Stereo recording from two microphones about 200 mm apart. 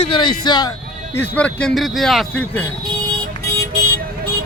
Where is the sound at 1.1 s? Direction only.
10° left (ahead or behind).